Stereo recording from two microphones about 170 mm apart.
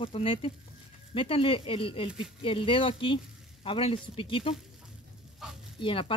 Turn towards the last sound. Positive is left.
turn(degrees=30)  # may be behind; listen again after turning